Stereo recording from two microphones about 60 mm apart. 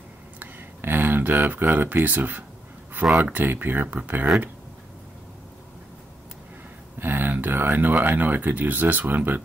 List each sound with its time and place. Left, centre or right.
0.4 s a sound: right
3.2 s speech: right
7.0 s speech: right